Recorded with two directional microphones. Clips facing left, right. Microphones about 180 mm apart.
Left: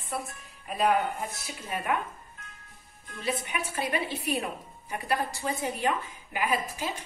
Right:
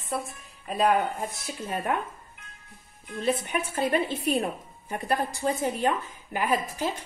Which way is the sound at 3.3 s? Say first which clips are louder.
Right 5 dB; 50° right (ahead or behind).